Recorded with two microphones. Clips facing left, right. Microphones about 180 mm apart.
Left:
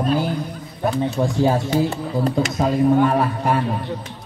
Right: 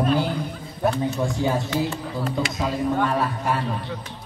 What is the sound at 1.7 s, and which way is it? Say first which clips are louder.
Speech: left 5 dB; 40° left (ahead or behind).